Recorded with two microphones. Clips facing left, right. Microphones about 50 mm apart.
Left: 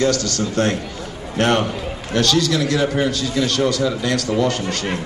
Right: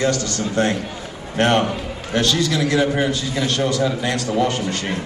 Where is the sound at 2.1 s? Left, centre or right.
Right.